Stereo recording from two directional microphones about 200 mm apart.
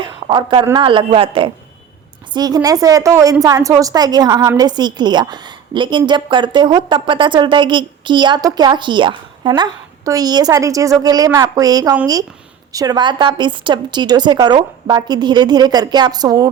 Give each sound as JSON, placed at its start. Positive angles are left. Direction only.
{"t": 0.0, "sound": "a woman's voice", "side_deg": -25}